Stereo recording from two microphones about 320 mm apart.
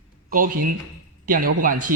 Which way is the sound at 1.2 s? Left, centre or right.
Right.